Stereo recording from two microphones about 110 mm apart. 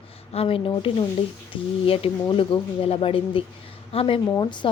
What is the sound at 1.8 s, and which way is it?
Speech, 60° left (ahead or behind).